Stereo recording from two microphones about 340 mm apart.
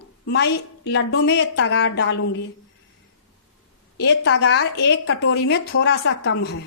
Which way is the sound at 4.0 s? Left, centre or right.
Left.